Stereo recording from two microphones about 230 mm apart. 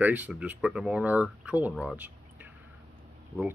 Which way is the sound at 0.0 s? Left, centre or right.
Centre.